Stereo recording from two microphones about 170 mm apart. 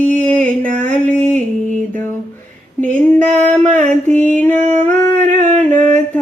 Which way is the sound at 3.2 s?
45° right (ahead or behind).